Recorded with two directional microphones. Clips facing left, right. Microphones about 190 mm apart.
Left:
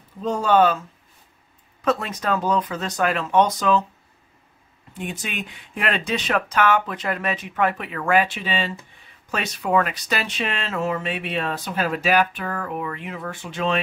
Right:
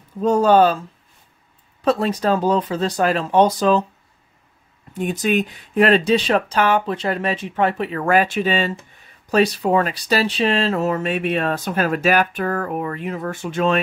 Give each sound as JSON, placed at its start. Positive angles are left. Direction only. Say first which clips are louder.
{"t": 0.2, "sound": "speech", "louder": "right 4 dB", "side_deg": -45}
{"t": 4.9, "sound": "speech", "louder": "right 11 dB", "side_deg": -40}
{"t": 9.3, "sound": "speech", "louder": "right 6 dB", "side_deg": -35}